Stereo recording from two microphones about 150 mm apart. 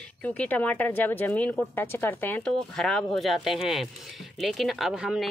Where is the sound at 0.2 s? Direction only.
10° left (ahead or behind).